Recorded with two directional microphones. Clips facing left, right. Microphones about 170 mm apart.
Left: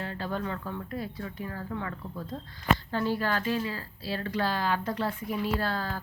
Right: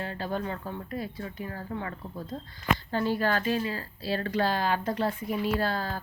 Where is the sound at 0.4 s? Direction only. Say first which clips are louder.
Even; 35° right (ahead or behind).